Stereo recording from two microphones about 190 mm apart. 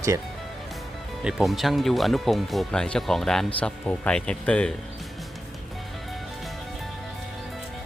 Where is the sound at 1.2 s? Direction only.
5° right (ahead or behind).